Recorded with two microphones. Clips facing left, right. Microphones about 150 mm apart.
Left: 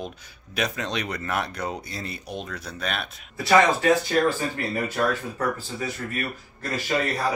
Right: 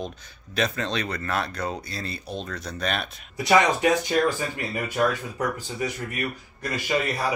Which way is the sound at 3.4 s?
20° right (ahead or behind).